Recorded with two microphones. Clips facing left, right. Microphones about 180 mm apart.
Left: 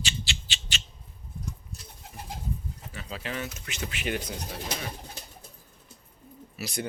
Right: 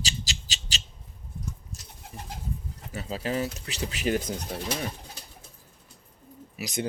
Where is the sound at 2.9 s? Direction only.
40° right (ahead or behind).